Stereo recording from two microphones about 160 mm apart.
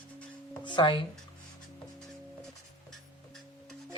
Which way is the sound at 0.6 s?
30° left (ahead or behind).